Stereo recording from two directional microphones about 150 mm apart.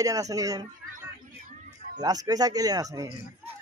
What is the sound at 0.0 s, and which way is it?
Speech, 25° right (ahead or behind).